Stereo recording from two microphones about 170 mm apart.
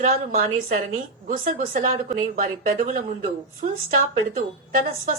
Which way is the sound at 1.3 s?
55° right (ahead or behind).